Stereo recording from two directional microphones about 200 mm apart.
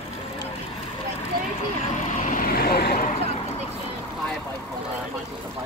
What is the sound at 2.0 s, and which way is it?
Vehicle, 40° left (ahead or behind).